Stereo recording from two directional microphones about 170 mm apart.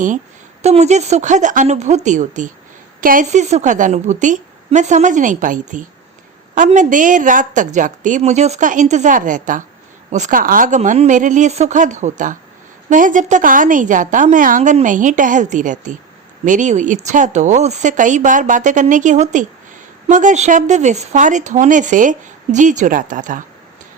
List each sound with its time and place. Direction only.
0.6 s a woman's voice: 40° right (ahead or behind)